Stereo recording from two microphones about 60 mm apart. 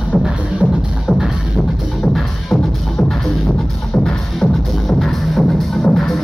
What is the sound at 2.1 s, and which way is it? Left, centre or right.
Music, centre.